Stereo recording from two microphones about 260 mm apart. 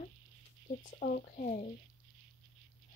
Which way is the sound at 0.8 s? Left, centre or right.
Left.